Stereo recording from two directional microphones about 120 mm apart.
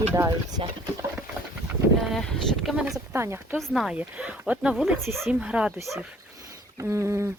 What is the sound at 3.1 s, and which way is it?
Speech, 20° right (ahead or behind).